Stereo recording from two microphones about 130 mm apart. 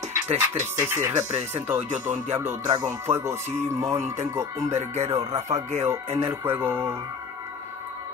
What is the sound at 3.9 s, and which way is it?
Speech, 60° right (ahead or behind).